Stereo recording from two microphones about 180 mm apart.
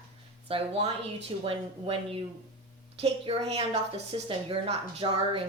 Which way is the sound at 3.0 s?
35° right (ahead or behind).